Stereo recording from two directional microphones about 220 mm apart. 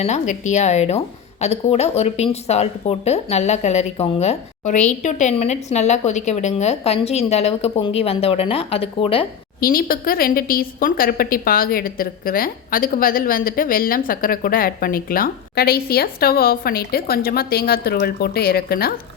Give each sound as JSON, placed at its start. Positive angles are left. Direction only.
{"t": 0.0, "sound": "a woman's voice", "side_deg": 30}
{"t": 9.6, "sound": "a woman's voice", "side_deg": 40}